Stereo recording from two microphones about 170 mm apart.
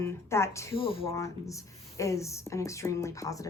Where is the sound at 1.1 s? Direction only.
20° left (ahead or behind).